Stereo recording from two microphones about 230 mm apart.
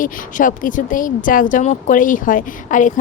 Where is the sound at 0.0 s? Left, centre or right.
Left.